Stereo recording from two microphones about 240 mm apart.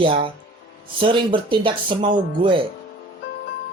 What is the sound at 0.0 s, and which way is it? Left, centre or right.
Speech, right.